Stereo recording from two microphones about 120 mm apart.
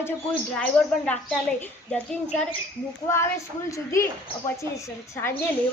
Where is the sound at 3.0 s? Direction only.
20° left (ahead or behind).